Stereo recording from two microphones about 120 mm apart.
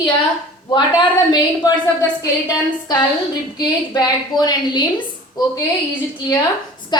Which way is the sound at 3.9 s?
35° left (ahead or behind).